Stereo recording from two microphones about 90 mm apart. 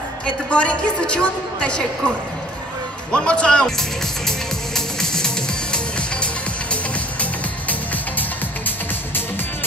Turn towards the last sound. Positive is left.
turn(degrees=15)  # may be behind; listen again after turning